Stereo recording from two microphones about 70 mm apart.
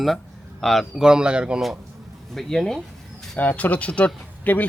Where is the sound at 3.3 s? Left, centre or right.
Left.